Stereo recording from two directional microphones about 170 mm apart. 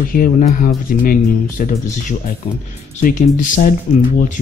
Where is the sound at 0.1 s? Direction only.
55° left (ahead or behind).